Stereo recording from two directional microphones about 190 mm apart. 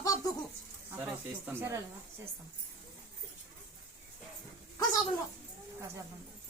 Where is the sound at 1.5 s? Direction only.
15° right (ahead or behind).